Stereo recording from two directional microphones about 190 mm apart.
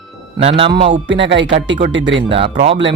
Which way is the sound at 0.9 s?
70° right (ahead or behind).